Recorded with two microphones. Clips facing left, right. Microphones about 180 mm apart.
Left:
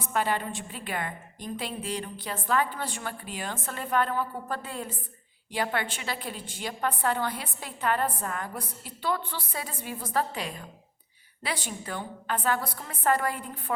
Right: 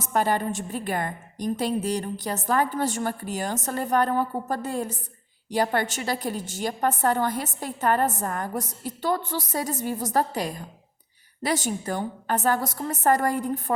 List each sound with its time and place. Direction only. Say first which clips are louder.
0.0 s a woman's voice: right 4 dB; 45° right (ahead or behind)